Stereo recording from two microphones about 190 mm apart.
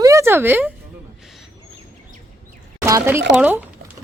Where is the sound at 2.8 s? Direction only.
15° right (ahead or behind).